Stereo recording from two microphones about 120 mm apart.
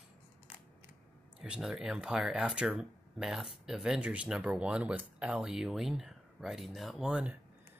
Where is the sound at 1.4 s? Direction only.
5° right (ahead or behind).